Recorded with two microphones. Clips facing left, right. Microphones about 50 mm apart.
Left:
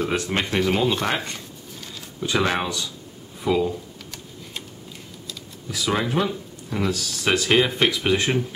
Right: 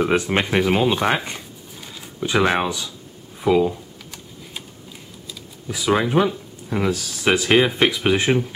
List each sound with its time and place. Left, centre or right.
0.0 s speech: centre
3.3 s computer keyboard: centre
5.7 s speech: centre